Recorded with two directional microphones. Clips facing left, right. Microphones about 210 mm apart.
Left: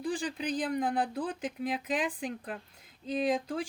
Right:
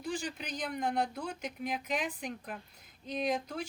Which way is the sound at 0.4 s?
35° left (ahead or behind).